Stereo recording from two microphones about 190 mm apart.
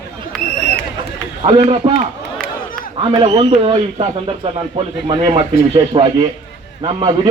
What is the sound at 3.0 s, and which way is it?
A man's voice, 30° right (ahead or behind).